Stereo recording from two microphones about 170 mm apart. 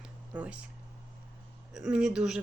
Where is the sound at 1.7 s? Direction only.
5° right (ahead or behind).